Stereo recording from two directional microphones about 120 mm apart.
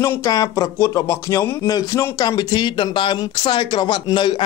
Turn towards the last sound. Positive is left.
turn(degrees=40)  # may be behind; listen again after turning